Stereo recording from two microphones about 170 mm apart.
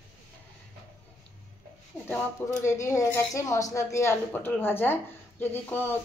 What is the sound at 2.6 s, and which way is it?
Speech, 15° left (ahead or behind).